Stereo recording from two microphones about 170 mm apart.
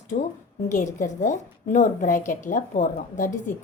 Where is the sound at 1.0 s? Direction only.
45° left (ahead or behind).